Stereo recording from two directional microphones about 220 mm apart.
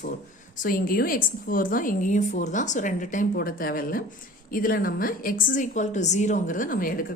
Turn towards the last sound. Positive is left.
turn(degrees=40)  # may be behind; listen again after turning